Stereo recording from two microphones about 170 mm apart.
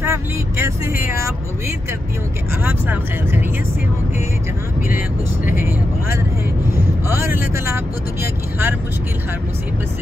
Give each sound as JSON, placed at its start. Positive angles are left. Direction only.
{"t": 0.0, "sound": "speech", "side_deg": -15}
{"t": 2.6, "sound": "speech", "side_deg": -10}
{"t": 5.6, "sound": "speech", "side_deg": -15}